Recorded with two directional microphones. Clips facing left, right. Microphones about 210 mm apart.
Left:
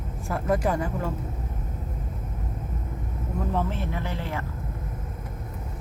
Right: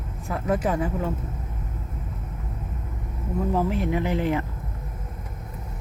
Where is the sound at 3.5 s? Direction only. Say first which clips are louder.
Right 6 dB; 5° right (ahead or behind).